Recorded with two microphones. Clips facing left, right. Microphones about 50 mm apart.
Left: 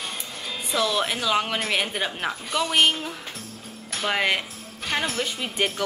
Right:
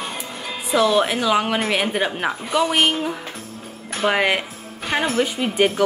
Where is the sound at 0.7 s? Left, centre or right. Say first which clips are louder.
Right 7 dB; centre.